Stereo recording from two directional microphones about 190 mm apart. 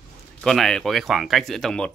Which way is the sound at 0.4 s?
Centre (ahead or behind).